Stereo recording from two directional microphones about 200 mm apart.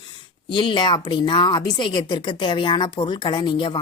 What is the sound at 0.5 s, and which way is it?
A woman's voice, 25° left (ahead or behind).